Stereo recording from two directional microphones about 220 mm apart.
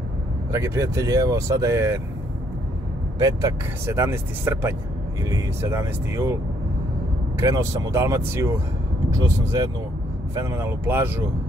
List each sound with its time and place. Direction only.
0.5 s speech: 15° right (ahead or behind)
3.2 s speech: 15° right (ahead or behind)